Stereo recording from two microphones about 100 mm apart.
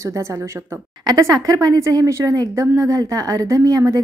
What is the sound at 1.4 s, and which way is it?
Speech, 35° right (ahead or behind).